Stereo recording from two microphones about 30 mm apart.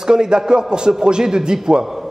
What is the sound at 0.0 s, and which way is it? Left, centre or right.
A man's voice, right.